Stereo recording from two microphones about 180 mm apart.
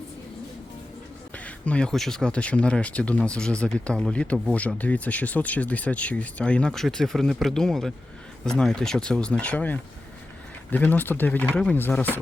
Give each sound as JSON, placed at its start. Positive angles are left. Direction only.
{"t": 1.3, "sound": "speech", "side_deg": 10}